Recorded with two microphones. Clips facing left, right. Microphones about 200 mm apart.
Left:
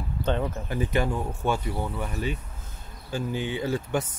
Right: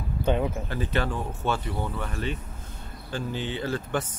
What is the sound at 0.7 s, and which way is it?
Speech, 15° left (ahead or behind).